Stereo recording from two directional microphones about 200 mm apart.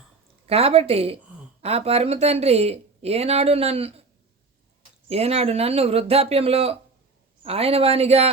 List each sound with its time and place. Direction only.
0.4 s speech: 30° right (ahead or behind)
5.0 s speech: 30° right (ahead or behind)